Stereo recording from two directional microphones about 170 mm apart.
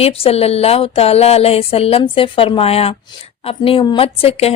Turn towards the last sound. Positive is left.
turn(degrees=35)  # may be behind; listen again after turning